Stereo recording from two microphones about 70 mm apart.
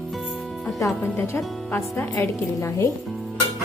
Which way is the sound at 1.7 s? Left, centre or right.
Left.